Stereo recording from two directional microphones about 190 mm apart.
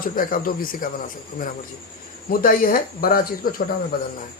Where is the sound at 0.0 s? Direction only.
50° left (ahead or behind).